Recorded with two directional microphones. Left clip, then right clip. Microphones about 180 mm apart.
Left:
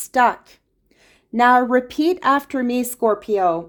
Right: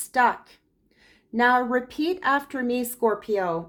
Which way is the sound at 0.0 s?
40° left (ahead or behind).